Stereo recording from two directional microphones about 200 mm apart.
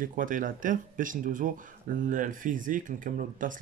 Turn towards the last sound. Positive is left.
turn(degrees=-40)  # may be behind; listen again after turning